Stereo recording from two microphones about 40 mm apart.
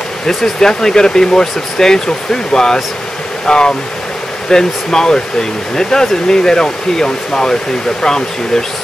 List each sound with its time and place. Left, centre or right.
0.6 s speech: centre